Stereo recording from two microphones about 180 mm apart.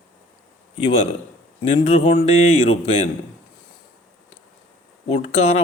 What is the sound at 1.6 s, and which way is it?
A man's voice, 35° left (ahead or behind).